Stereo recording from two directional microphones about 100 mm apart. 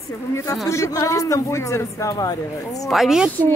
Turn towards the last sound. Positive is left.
turn(degrees=0)  # may be behind; listen again after turning